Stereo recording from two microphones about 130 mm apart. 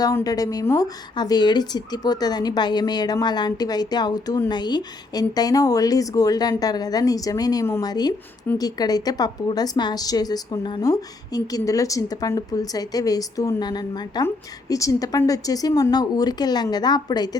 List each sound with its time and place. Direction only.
0.0 s a woman's voice: 30° left (ahead or behind)